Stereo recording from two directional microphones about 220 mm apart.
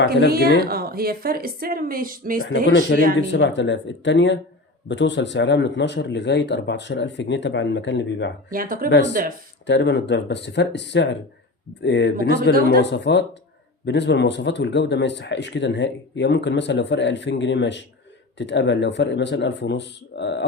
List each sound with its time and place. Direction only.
0.3 s a woman's voice: 45° right (ahead or behind)
2.6 s speech: 55° left (ahead or behind)
8.5 s speech: 40° right (ahead or behind)
8.9 s speech: 55° left (ahead or behind)